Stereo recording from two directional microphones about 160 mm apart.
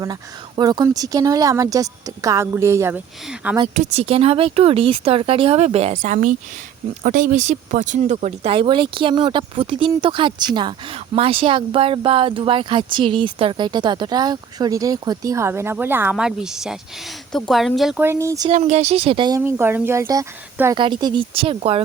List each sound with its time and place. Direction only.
0.0 s a woman's voice: 25° right (ahead or behind); by 3.6 s 10° right (ahead or behind)
3.8 s speech: 40° right (ahead or behind); by 18.0 s centre (ahead or behind)
18.0 s a woman's voice: 15° right (ahead or behind)
18.5 s speech: 45° right (ahead or behind)
19.4 s speech: 15° right (ahead or behind); by 21.8 s 35° right (ahead or behind)